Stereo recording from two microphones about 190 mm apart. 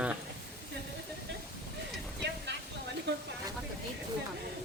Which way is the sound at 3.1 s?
60° right (ahead or behind).